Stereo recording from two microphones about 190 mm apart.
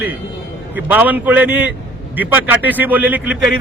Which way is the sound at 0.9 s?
10° right (ahead or behind).